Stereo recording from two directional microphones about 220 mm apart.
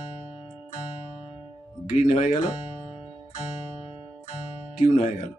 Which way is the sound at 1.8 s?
35° left (ahead or behind).